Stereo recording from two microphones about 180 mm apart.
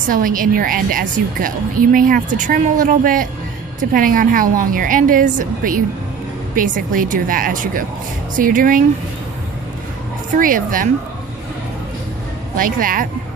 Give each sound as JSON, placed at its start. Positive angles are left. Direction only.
{"t": 0.1, "sound": "a woman's voice", "side_deg": -50}
{"t": 10.3, "sound": "a woman's voice", "side_deg": -50}
{"t": 12.5, "sound": "a woman's voice", "side_deg": -50}